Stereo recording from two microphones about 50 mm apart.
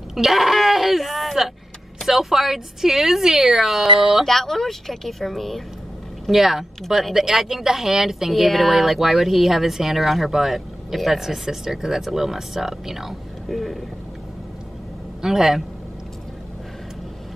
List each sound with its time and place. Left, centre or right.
0.1 s speech: centre
4.3 s speech: centre
6.2 s speech: centre
15.2 s speech: centre